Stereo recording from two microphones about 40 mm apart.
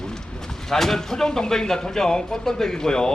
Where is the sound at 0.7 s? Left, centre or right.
Centre.